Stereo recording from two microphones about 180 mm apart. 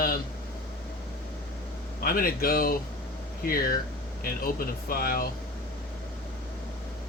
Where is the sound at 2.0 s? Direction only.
55° left (ahead or behind).